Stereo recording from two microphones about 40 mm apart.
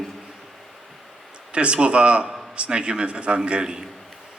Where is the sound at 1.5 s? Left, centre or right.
Right.